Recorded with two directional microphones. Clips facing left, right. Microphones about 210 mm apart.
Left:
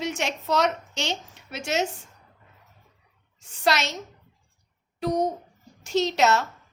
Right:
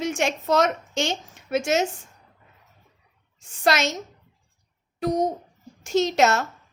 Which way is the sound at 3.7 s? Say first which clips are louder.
Right 3 dB; 50° right (ahead or behind).